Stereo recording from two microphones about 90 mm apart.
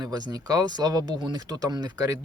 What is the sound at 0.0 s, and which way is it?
Speech, 50° right (ahead or behind).